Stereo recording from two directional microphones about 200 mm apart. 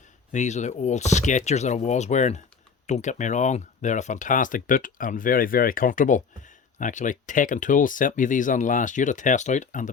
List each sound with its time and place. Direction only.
0.3 s speech: 35° left (ahead or behind)